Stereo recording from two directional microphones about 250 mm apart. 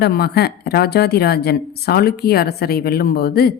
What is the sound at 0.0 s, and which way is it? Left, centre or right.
Speech, left.